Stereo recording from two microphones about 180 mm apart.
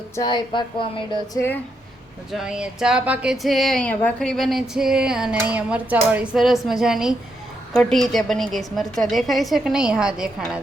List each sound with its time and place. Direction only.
0.2 s speech: 25° left (ahead or behind)
2.3 s speech: 5° right (ahead or behind)